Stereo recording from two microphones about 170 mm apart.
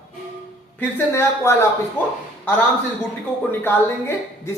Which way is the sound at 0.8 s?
10° left (ahead or behind).